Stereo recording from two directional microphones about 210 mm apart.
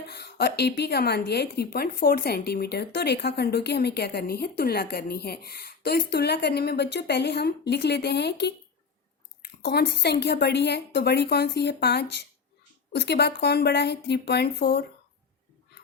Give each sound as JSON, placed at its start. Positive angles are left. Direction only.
{"t": 0.1, "sound": "a woman's voice", "side_deg": 50}